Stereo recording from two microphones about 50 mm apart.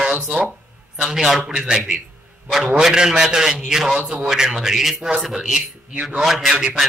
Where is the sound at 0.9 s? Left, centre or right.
Centre.